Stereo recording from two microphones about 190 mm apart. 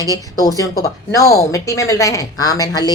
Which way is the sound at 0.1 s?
20° left (ahead or behind).